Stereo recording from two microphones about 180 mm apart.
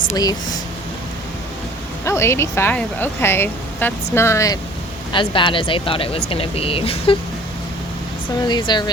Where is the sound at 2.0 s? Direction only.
15° left (ahead or behind).